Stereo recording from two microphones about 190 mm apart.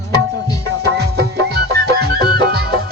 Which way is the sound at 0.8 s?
60° right (ahead or behind).